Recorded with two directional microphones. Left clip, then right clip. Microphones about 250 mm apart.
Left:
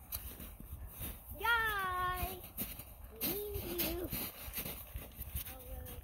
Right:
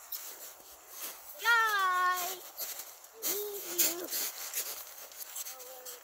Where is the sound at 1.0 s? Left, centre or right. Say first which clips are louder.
Right 5 dB; centre.